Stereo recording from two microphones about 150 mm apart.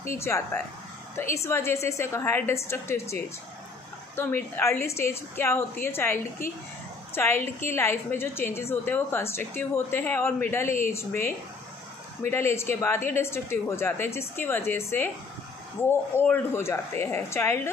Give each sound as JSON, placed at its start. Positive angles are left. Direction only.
{"t": 0.1, "sound": "a woman's voice", "side_deg": 15}
{"t": 4.2, "sound": "a woman's voice", "side_deg": 15}
{"t": 16.2, "sound": "a woman's voice", "side_deg": 15}